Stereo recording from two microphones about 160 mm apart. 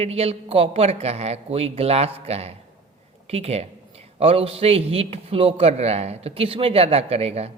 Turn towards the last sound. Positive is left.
turn(degrees=-40)  # may be behind; listen again after turning